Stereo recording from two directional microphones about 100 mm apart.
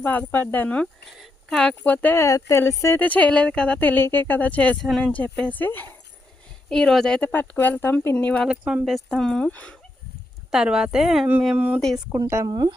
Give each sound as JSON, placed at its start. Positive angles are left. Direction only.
{"t": 0.0, "sound": "speech", "side_deg": 15}
{"t": 1.2, "sound": "a sound", "side_deg": 5}
{"t": 1.8, "sound": "speech", "side_deg": 15}
{"t": 2.2, "sound": "speech", "side_deg": 30}
{"t": 3.0, "sound": "speech", "side_deg": 15}
{"t": 6.7, "sound": "speech", "side_deg": 5}
{"t": 8.4, "sound": "speech", "side_deg": -10}
{"t": 10.5, "sound": "speech", "side_deg": -5}
{"t": 11.5, "sound": "speech", "side_deg": -15}
{"t": 12.5, "sound": "speech", "side_deg": -45}